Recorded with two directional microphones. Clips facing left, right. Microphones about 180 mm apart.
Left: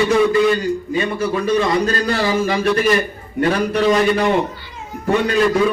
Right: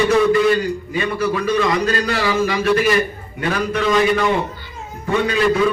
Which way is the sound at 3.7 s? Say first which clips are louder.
Right 2 dB; 35° left (ahead or behind).